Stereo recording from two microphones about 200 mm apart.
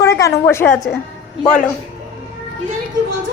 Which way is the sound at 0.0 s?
15° left (ahead or behind).